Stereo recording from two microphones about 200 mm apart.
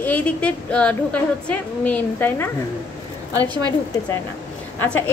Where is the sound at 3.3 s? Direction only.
20° right (ahead or behind).